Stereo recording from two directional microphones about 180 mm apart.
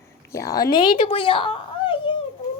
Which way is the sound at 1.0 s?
30° left (ahead or behind).